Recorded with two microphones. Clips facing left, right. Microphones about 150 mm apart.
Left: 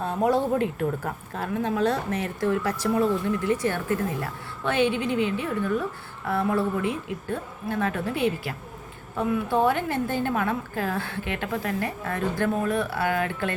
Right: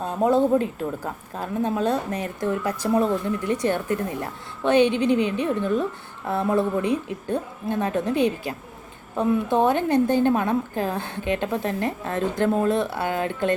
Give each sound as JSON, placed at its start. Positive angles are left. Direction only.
{"t": 0.2, "sound": "a woman's voice", "side_deg": -25}